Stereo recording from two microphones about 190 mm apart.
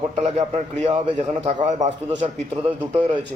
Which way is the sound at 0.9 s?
30° right (ahead or behind).